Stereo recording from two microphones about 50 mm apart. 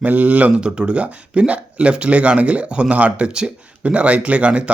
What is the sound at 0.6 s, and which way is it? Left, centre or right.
Speech, centre.